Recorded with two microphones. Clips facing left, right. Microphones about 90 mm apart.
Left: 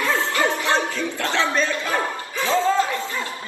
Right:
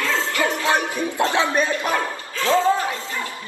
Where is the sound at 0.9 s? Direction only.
20° right (ahead or behind).